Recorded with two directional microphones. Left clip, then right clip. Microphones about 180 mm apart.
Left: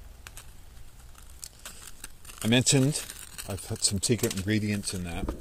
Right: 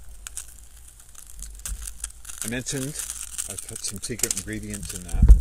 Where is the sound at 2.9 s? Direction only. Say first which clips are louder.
Right 2 dB; 20° right (ahead or behind).